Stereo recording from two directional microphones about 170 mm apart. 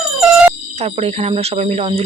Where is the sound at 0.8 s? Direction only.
40° right (ahead or behind).